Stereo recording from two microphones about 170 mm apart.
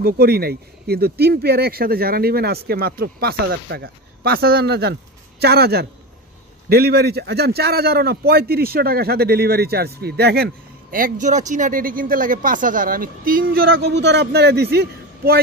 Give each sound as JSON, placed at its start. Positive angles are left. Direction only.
{"t": 0.0, "sound": "a man's voice", "side_deg": -65}